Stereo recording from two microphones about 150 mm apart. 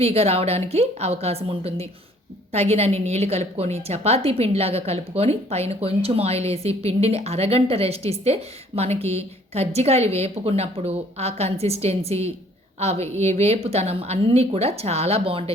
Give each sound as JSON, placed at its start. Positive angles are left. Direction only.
{"t": 0.0, "sound": "a woman's voice", "side_deg": -40}